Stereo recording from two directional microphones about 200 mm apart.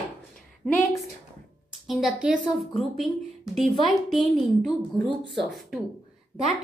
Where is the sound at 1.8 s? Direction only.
5° right (ahead or behind).